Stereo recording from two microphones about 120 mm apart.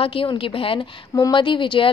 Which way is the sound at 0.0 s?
50° left (ahead or behind).